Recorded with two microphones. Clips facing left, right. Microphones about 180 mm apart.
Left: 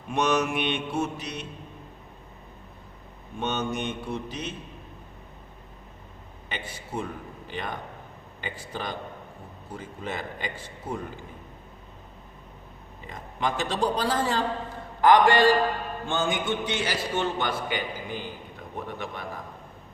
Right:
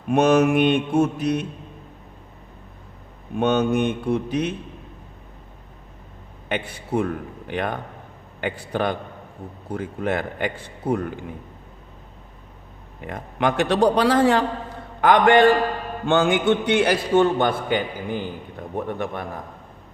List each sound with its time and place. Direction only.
0.1 s mantra: 50° right (ahead or behind)
3.3 s a man's voice: 60° right (ahead or behind)
6.5 s a man's voice: 60° right (ahead or behind)
13.0 s a man's voice: 65° right (ahead or behind)
18.9 s mantra: 55° right (ahead or behind)